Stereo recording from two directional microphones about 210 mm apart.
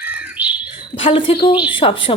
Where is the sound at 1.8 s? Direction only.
25° left (ahead or behind).